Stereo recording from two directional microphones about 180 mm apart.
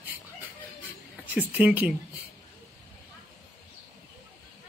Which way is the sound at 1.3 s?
10° right (ahead or behind).